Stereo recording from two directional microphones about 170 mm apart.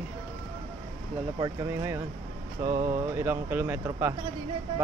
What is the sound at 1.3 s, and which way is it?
Speech, 20° right (ahead or behind).